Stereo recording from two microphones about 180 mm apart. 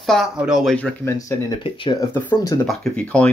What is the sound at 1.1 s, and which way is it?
Speech, 20° left (ahead or behind).